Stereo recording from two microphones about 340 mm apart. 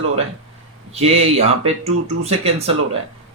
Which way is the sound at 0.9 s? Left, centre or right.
Centre.